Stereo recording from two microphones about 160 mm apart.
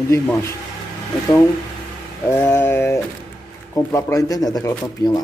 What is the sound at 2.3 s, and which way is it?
A man's voice, 15° left (ahead or behind).